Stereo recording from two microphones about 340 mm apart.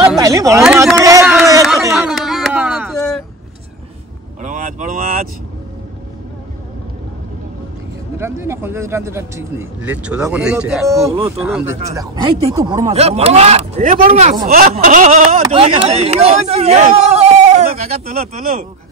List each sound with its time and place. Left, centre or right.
0.0 s a sound: centre
4.4 s vehicle: right
8.2 s speech: centre